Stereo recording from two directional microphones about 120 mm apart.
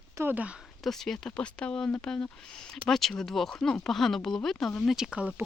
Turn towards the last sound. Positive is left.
turn(degrees=-10)  # may be behind; listen again after turning